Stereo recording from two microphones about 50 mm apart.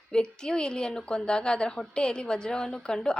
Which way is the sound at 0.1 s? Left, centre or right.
Centre.